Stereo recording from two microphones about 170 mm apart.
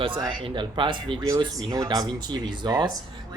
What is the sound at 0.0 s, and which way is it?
Speech, 30° right (ahead or behind).